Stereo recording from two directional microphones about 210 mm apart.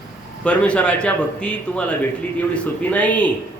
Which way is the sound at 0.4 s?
5° left (ahead or behind).